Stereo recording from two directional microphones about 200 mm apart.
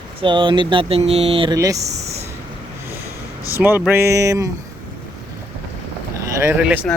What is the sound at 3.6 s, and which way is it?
Speech, 10° right (ahead or behind).